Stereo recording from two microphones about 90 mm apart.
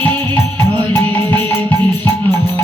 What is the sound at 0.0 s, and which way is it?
Music, 25° left (ahead or behind).